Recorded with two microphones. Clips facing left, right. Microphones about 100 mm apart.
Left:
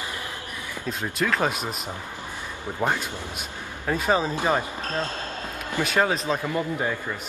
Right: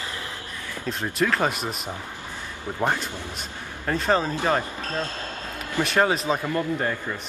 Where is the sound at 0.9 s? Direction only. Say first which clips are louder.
Right 2 dB; centre (ahead or behind).